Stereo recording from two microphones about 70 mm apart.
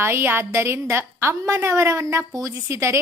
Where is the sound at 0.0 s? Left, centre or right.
Right.